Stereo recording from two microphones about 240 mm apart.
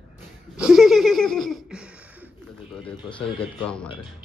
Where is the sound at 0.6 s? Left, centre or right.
Centre.